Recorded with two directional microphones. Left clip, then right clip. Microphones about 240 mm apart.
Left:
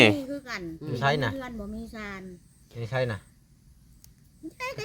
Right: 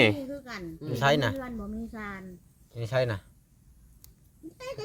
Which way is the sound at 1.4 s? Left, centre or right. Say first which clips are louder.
Even; left.